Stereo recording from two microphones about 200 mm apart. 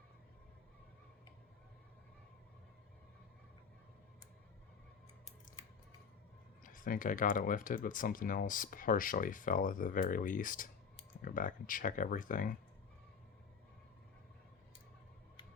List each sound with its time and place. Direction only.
6.6 s speech: 45° left (ahead or behind)